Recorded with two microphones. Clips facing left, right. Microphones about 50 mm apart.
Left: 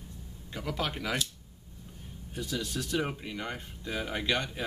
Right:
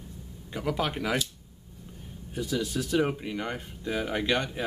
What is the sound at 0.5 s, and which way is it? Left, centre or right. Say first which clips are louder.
Speech: right 5 dB; centre.